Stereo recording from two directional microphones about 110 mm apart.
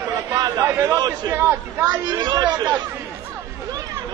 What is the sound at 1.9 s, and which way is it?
Speech, 40° right (ahead or behind).